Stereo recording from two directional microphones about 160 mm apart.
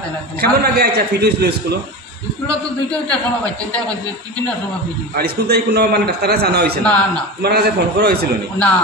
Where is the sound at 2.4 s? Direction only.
5° left (ahead or behind).